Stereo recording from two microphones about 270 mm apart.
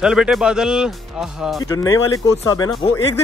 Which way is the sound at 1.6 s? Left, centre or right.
Centre.